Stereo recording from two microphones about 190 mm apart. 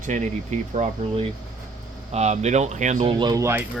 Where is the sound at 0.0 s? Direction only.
40° right (ahead or behind).